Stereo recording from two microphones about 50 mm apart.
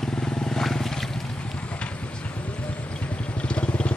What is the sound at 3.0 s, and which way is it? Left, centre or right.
Vehicle, left.